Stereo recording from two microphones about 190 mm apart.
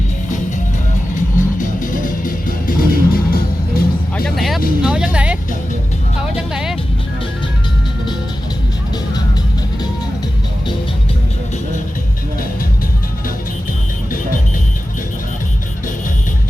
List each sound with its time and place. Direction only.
1.1 s music: 45° left (ahead or behind)
4.4 s vehicle: centre (ahead or behind)
6.3 s music: 5° right (ahead or behind)